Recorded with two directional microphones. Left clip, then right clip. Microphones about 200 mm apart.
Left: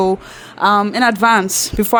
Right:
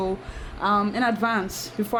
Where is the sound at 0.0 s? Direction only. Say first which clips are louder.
Left 12 dB; 50° left (ahead or behind).